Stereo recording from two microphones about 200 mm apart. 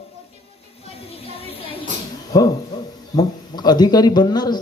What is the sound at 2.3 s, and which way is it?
Speech, 20° left (ahead or behind).